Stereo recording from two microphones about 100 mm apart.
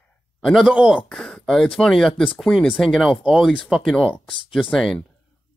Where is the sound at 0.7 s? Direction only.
10° right (ahead or behind).